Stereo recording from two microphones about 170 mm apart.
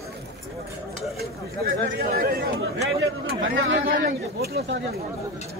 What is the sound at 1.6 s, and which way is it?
Speech, 60° right (ahead or behind).